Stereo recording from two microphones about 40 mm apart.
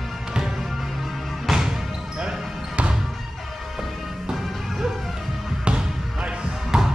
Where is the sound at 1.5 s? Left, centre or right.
Centre.